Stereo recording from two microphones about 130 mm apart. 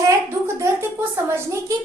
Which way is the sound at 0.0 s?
20° right (ahead or behind).